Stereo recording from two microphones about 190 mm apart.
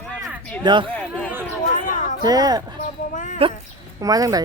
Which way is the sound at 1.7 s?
40° left (ahead or behind).